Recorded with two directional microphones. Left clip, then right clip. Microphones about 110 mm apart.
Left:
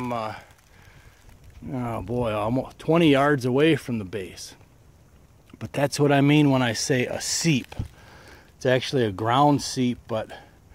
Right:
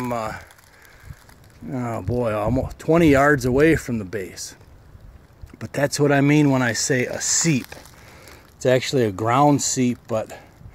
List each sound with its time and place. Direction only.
0.0 s speech: 20° left (ahead or behind)
1.7 s speech: 35° left (ahead or behind); by 4.6 s 15° left (ahead or behind)
5.6 s speech: 25° left (ahead or behind)
8.1 s speech: 20° left (ahead or behind)